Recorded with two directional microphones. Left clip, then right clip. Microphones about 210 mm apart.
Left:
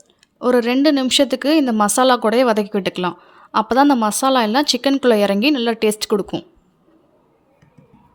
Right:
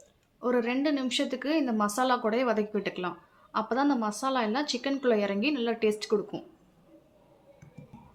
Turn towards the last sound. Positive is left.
turn(degrees=50)  # may be behind; listen again after turning